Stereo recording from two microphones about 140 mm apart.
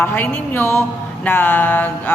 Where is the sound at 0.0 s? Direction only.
15° left (ahead or behind).